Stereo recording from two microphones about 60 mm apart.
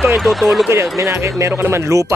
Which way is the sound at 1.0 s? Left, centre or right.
Right.